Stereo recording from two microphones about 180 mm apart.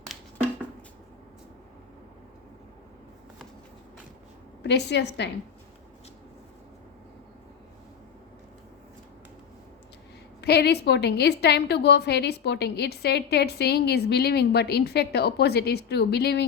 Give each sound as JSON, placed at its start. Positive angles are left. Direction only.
{"t": 4.6, "sound": "a woman's voice", "side_deg": 70}
{"t": 10.4, "sound": "a woman's voice", "side_deg": 65}